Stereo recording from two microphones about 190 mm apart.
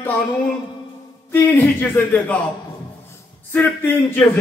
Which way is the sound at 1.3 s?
10° left (ahead or behind).